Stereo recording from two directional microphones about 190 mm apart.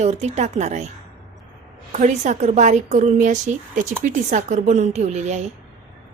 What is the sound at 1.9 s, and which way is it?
Speech, 40° right (ahead or behind).